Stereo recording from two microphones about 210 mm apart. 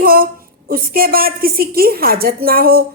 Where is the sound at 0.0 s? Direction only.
45° right (ahead or behind).